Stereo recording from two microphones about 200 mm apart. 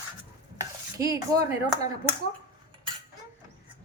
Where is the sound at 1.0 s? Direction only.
15° right (ahead or behind).